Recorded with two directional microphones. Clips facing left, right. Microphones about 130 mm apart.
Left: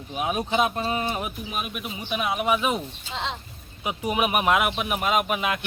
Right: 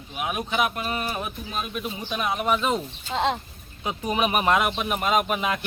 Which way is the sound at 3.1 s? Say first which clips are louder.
Right 8 dB; 45° right (ahead or behind).